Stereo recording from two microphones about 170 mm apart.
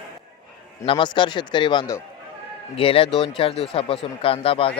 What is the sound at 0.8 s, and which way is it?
A man's voice, 30° left (ahead or behind).